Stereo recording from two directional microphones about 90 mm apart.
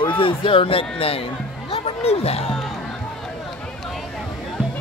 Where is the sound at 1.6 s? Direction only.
90° left.